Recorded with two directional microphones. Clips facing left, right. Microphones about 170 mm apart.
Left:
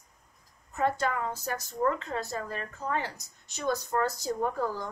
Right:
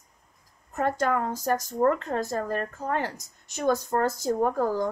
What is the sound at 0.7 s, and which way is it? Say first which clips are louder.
A woman's voice: right 3 dB; 50° right (ahead or behind).